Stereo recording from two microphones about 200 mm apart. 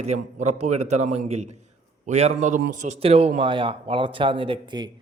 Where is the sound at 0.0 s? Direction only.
35° right (ahead or behind).